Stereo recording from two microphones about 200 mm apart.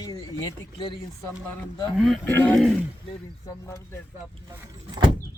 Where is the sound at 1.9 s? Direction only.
Centre (ahead or behind).